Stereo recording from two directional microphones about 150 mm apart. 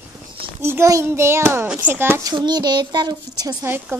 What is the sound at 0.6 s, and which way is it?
A child's voice, 15° right (ahead or behind).